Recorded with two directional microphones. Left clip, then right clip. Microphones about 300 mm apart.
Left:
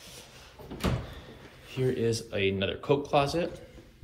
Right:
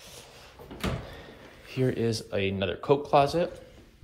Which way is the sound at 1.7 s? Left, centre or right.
Right.